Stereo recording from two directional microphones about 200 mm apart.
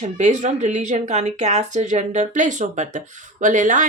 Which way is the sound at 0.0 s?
35° right (ahead or behind).